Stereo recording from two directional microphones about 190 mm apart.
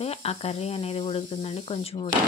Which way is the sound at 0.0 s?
30° left (ahead or behind).